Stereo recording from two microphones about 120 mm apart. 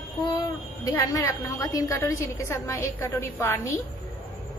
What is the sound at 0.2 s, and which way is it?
A woman's voice, 35° left (ahead or behind).